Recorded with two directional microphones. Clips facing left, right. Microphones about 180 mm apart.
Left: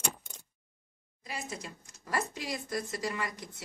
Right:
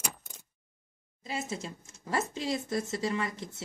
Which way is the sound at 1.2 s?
25° right (ahead or behind).